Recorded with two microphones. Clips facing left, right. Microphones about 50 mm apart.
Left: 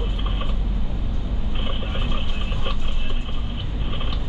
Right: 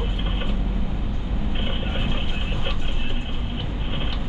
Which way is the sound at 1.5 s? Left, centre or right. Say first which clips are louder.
Right 1 dB; right.